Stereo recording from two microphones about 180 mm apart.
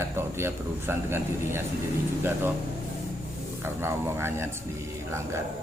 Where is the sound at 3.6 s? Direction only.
15° right (ahead or behind).